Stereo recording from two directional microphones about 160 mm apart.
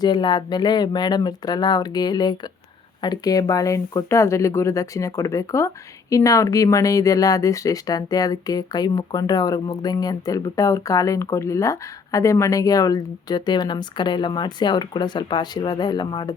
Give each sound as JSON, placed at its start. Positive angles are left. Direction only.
{"t": 0.0, "sound": "speech", "side_deg": 25}